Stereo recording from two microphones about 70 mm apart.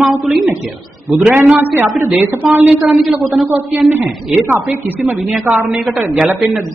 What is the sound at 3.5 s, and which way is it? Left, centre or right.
A woman's voice, right.